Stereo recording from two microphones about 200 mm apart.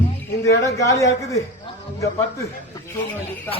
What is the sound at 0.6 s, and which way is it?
Speech, 15° left (ahead or behind).